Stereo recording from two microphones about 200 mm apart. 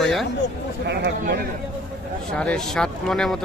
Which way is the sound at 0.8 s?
60° right (ahead or behind).